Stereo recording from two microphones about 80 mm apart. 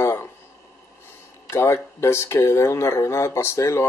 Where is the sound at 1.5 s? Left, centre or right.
Left.